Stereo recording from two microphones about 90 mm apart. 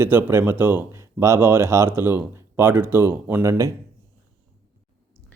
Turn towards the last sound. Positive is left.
turn(degrees=-35)  # may be behind; listen again after turning